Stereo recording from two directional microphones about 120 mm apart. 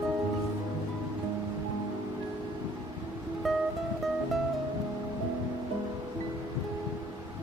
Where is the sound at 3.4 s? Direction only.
Centre (ahead or behind).